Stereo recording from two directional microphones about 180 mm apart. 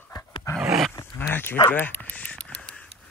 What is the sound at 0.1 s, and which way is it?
Dog, 20° left (ahead or behind).